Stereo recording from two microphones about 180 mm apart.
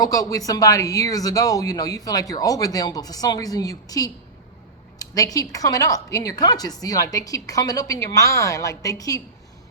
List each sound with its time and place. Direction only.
0.0 s speech: 20° left (ahead or behind)